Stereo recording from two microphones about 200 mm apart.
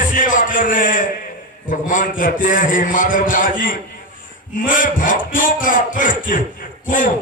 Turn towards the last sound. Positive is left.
turn(degrees=40)  # may be behind; listen again after turning